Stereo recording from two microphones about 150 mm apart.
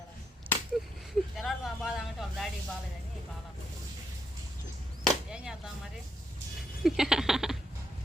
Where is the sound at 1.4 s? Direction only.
Centre (ahead or behind).